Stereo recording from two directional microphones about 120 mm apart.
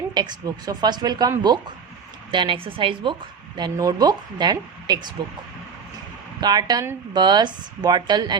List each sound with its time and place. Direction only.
0.1 s a woman's voice: 35° right (ahead or behind)
3.6 s speech: 35° right (ahead or behind)
6.4 s speech: 35° right (ahead or behind)